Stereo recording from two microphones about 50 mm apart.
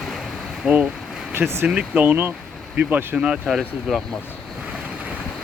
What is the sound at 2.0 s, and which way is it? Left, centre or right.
Speech, right.